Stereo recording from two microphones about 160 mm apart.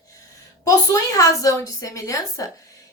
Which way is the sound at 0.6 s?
20° left (ahead or behind).